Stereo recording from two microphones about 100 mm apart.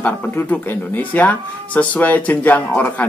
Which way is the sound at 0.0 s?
15° left (ahead or behind).